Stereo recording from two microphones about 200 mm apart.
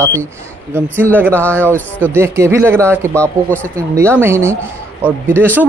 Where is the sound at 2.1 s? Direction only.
10° right (ahead or behind).